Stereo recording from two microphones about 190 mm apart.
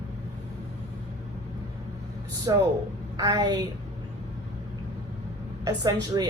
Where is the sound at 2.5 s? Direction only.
20° right (ahead or behind).